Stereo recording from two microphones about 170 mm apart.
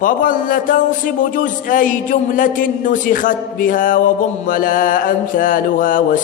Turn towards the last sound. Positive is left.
turn(degrees=55)  # may be behind; listen again after turning